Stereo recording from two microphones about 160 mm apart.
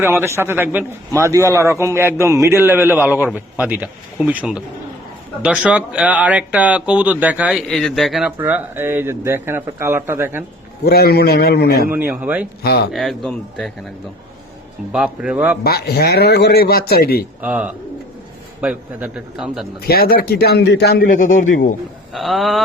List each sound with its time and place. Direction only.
0.0 s a man's voice: 15° right (ahead or behind)
8.4 s a man's voice: 10° right (ahead or behind)
10.8 s a man's voice: 80° left
11.9 s a man's voice: 10° right (ahead or behind)
12.6 s a man's voice: 80° left
12.9 s speech: centre (ahead or behind)
14.9 s a man's voice: 5° right (ahead or behind)
15.6 s a man's voice: 75° left (ahead or behind)
17.4 s a man's voice: 10° right (ahead or behind)
19.8 s a man's voice: 70° left (ahead or behind); by 21.8 s 55° left (ahead or behind)
22.1 s speech: centre (ahead or behind)